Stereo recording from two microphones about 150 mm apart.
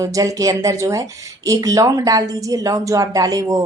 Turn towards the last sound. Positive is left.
turn(degrees=-20)  # may be behind; listen again after turning